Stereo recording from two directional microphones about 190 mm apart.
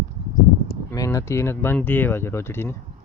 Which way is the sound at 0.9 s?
15° left (ahead or behind).